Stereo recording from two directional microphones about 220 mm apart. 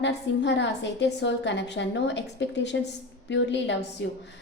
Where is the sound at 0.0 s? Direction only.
55° left (ahead or behind).